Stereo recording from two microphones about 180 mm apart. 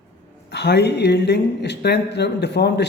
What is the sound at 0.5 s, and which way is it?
Speech, 70° left (ahead or behind).